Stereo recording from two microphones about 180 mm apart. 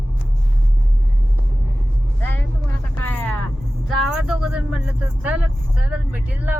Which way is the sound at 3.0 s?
10° left (ahead or behind).